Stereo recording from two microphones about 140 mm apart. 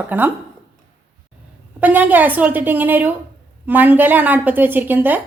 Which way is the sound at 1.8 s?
10° right (ahead or behind).